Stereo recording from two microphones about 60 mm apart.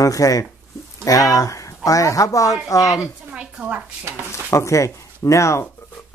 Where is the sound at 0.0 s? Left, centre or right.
Left.